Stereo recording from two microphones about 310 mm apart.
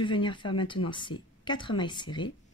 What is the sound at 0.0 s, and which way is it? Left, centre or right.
Speech, centre.